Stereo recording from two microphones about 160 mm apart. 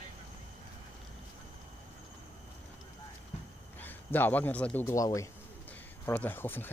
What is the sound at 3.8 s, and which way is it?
A man's voice, 10° left (ahead or behind).